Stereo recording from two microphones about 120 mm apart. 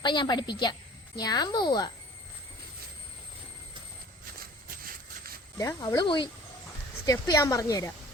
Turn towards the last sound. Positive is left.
turn(degrees=25)  # may be behind; listen again after turning